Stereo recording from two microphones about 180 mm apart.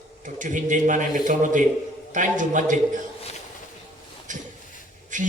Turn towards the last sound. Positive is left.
turn(degrees=-45)  # may be behind; listen again after turning